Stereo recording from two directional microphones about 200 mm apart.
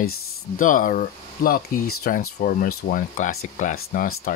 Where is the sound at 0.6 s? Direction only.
40° left (ahead or behind).